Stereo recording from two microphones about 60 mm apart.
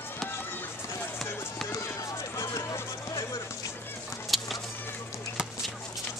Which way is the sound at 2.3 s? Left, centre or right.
Left.